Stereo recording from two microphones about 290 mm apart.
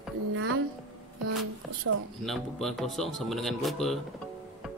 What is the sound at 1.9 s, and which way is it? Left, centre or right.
Speech, right.